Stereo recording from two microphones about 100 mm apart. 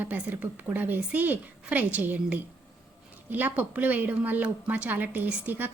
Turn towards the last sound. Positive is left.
turn(degrees=-20)  # may be behind; listen again after turning